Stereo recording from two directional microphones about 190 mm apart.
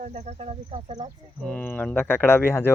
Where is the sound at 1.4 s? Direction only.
5° left (ahead or behind).